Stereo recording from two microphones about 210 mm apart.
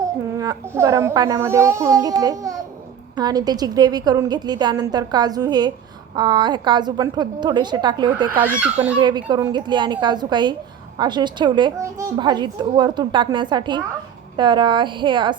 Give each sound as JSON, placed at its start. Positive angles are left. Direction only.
{"t": 0.3, "sound": "a child's voice", "side_deg": -15}
{"t": 8.6, "sound": "a child's voice", "side_deg": -5}
{"t": 9.0, "sound": "speech", "side_deg": -20}